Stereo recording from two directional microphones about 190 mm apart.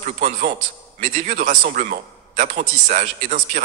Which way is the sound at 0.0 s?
45° right (ahead or behind).